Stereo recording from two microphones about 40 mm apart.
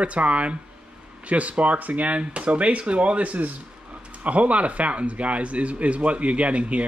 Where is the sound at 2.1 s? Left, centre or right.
Right.